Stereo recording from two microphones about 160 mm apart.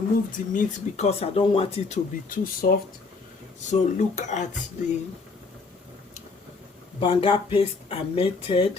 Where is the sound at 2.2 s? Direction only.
65° left (ahead or behind).